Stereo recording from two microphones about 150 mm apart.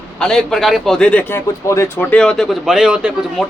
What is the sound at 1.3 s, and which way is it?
Speech, 15° left (ahead or behind).